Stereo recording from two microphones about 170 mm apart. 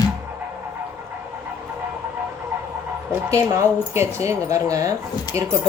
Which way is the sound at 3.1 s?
15° right (ahead or behind).